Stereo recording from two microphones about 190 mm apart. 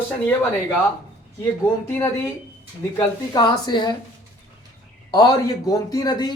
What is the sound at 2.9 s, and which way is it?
A man's voice, 20° left (ahead or behind).